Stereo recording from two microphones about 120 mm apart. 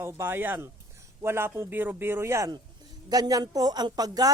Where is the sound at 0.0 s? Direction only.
20° right (ahead or behind).